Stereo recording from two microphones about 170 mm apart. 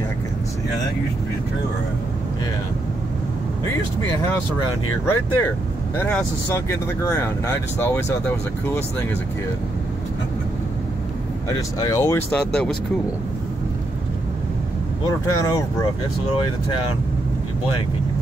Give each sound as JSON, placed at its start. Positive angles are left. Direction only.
{"t": 5.0, "sound": "speech", "side_deg": 15}
{"t": 11.4, "sound": "speech", "side_deg": 20}
{"t": 12.3, "sound": "speech", "side_deg": 5}
{"t": 15.0, "sound": "speech", "side_deg": 20}